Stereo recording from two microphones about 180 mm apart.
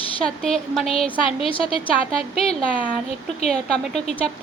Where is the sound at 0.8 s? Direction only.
30° left (ahead or behind).